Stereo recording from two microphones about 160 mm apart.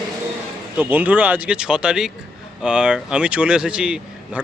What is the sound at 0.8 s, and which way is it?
Speech, 10° right (ahead or behind).